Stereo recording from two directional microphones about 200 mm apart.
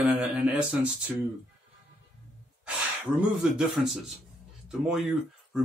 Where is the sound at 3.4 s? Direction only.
Centre (ahead or behind).